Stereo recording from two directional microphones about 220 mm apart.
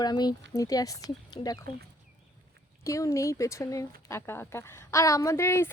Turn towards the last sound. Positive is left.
turn(degrees=10)  # may be behind; listen again after turning